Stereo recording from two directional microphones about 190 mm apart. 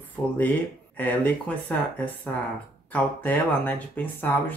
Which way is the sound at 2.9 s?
10° left (ahead or behind).